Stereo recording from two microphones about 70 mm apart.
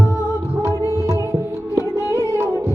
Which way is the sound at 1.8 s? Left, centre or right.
Left.